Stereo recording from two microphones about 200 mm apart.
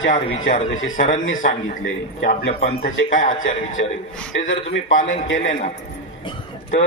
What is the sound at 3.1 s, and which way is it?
Speech, 40° left (ahead or behind).